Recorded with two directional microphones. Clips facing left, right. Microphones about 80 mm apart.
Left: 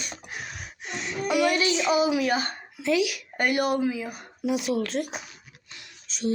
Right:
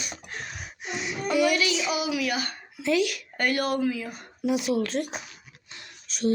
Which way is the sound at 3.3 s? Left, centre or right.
Centre.